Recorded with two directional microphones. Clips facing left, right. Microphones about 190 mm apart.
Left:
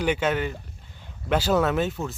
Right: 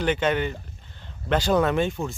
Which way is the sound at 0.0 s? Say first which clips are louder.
Right 1 dB; 10° left (ahead or behind).